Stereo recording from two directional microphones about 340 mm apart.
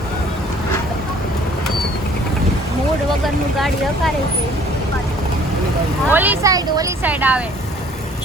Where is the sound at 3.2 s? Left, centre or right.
Centre.